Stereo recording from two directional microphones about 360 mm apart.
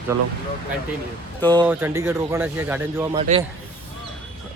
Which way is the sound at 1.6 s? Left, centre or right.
Centre.